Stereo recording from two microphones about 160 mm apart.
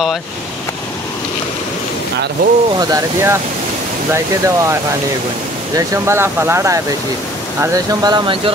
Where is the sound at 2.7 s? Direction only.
25° right (ahead or behind).